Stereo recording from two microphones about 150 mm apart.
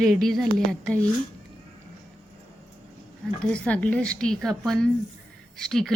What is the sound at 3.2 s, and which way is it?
A woman's voice, 5° left (ahead or behind).